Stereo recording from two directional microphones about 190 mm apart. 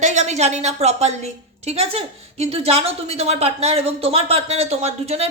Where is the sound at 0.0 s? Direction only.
35° right (ahead or behind).